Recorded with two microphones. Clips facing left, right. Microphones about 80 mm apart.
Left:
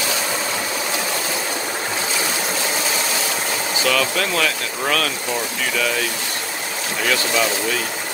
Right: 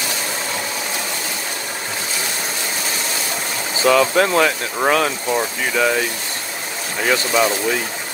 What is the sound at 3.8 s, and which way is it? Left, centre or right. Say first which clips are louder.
Speech: right 7 dB; right.